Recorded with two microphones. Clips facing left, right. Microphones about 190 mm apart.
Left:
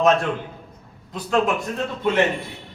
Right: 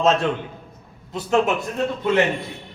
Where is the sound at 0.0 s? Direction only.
25° right (ahead or behind).